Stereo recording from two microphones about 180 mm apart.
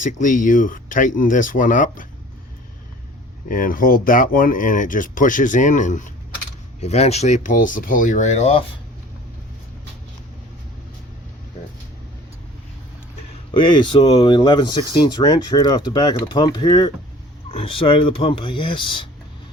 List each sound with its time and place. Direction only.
0.0 s speech: 45° left (ahead or behind)
3.5 s speech: 50° left (ahead or behind)
13.5 s speech: 25° left (ahead or behind)